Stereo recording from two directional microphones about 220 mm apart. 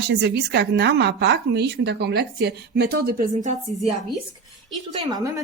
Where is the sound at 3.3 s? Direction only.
30° right (ahead or behind).